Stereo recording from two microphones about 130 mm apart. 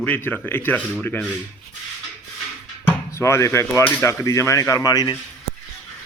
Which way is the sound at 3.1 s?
20° left (ahead or behind).